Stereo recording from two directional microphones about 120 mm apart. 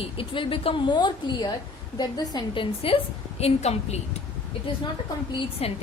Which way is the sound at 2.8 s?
55° left (ahead or behind).